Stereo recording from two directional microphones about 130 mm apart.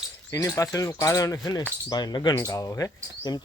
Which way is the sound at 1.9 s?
30° left (ahead or behind).